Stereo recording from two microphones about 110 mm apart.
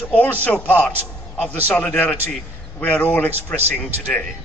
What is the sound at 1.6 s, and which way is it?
A man's voice, 15° left (ahead or behind).